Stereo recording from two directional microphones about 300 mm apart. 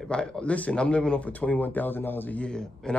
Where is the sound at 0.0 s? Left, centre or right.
Centre.